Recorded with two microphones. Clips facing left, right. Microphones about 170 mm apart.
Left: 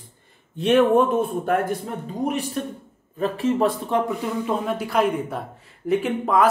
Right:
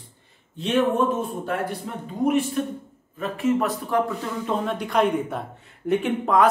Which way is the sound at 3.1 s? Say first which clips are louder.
Left 1 dB; 30° left (ahead or behind).